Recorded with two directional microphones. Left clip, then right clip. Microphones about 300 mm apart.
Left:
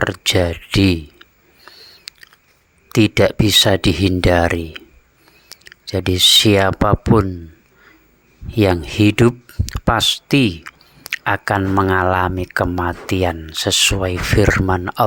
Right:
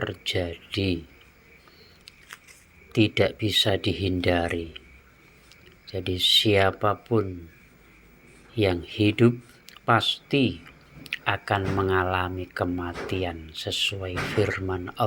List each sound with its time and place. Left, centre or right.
0.0 s speech: left
2.9 s speech: left
8.5 s speech: left